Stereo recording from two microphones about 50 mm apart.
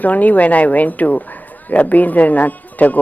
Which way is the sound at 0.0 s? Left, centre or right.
Left.